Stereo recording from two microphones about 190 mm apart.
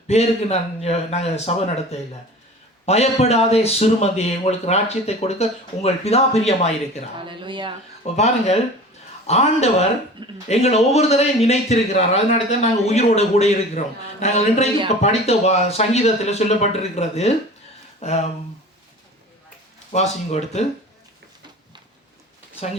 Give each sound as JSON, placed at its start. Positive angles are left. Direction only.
{"t": 0.1, "sound": "speech", "side_deg": 35}
{"t": 7.2, "sound": "speech", "side_deg": -25}
{"t": 8.0, "sound": "speech", "side_deg": 35}
{"t": 19.9, "sound": "speech", "side_deg": 35}